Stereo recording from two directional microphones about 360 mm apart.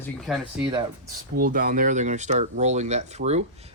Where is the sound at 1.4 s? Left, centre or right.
Right.